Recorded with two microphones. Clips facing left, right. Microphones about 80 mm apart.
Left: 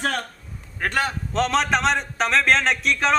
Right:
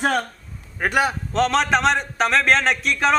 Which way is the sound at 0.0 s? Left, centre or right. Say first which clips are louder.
Right 5 dB; centre.